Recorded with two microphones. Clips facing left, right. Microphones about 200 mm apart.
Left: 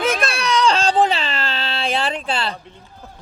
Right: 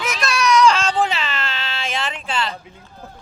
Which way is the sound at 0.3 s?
30° left (ahead or behind).